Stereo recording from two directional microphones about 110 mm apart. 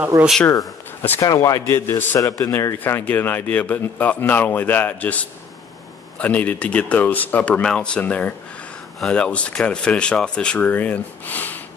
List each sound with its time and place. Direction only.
0.1 s speech: 30° right (ahead or behind)
1.2 s a man's voice: 30° left (ahead or behind)